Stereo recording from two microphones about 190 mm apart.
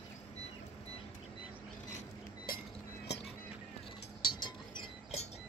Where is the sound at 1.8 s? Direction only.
45° left (ahead or behind).